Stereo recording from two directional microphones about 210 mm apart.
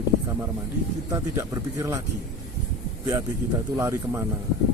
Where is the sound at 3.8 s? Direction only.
15° right (ahead or behind).